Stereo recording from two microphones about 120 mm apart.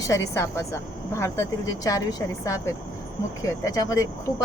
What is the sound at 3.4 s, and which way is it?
A woman's voice, 30° left (ahead or behind).